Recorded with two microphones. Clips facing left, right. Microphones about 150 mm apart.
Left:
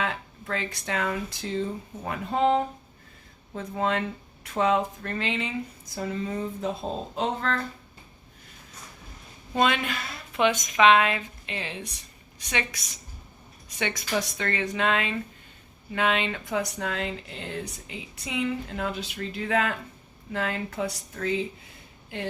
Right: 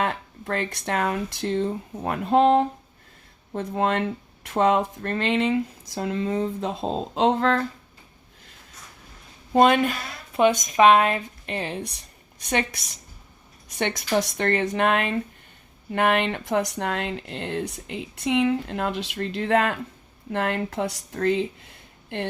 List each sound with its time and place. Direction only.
0.0 s speech: 55° right (ahead or behind); by 6.7 s 70° right (ahead or behind)
7.2 s speech: 90° right
9.5 s speech: 50° right (ahead or behind)
13.7 s speech: 55° right (ahead or behind)